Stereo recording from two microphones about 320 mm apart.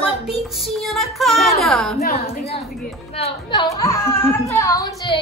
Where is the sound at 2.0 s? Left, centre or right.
Left.